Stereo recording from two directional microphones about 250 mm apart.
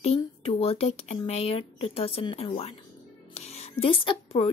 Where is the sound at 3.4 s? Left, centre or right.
Left.